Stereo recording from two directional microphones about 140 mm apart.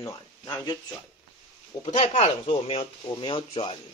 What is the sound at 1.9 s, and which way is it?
Speech, 50° left (ahead or behind).